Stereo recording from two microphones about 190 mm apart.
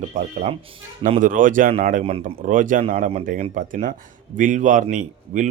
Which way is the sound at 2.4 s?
45° right (ahead or behind).